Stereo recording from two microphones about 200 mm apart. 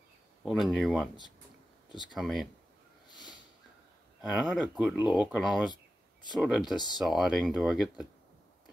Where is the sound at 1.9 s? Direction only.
20° left (ahead or behind).